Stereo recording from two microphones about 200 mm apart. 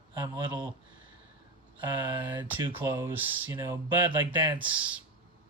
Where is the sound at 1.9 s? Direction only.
25° right (ahead or behind).